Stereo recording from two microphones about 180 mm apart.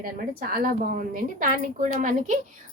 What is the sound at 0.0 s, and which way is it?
A woman's voice, 55° right (ahead or behind).